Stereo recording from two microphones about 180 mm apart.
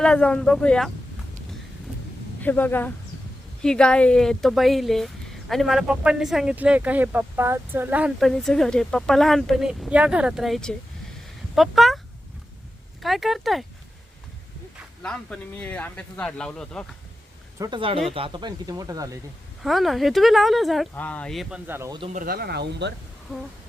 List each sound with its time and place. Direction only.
0.0 s speech: 5° left (ahead or behind)
2.4 s speech: 10° left (ahead or behind)
13.0 s speech: centre (ahead or behind)
15.0 s speech: 5° left (ahead or behind)
17.6 s speech: 25° right (ahead or behind)
19.6 s speech: centre (ahead or behind)
21.7 s speech: 15° right (ahead or behind)
22.1 s speech: 50° right (ahead or behind); by 22.9 s 70° right (ahead or behind)